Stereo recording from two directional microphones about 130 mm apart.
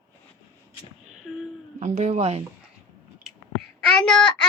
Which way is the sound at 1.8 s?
60° right (ahead or behind).